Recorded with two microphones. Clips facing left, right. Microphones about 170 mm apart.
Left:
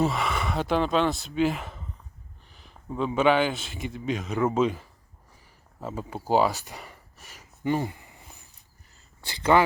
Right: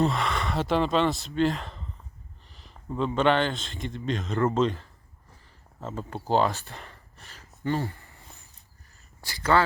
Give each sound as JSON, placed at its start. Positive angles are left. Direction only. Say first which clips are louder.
{"t": 0.0, "sound": "a man's voice", "louder": "even", "side_deg": 5}